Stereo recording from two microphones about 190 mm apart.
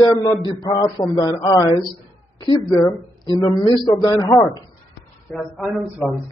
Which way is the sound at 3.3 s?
20° left (ahead or behind).